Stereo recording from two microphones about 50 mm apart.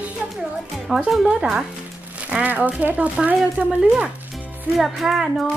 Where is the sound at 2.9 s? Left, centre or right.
Right.